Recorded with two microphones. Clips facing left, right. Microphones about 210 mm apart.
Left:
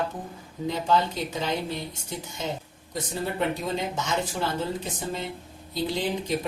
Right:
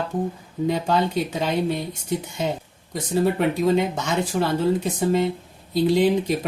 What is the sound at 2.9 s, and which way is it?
Speech, 65° right (ahead or behind).